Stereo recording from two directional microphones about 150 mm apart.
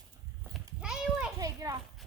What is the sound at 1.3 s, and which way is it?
Children playing, 20° right (ahead or behind).